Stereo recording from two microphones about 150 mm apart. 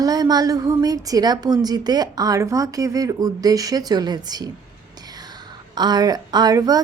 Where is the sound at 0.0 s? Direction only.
25° right (ahead or behind).